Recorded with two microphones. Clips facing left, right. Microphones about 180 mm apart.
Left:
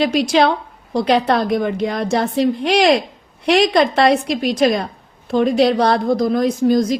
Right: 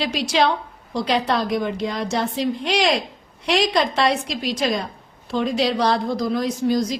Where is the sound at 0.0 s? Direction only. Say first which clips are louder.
Left 6 dB; 50° left (ahead or behind).